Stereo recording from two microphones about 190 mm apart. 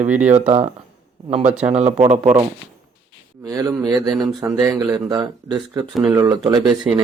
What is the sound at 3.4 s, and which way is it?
Speech, 20° right (ahead or behind).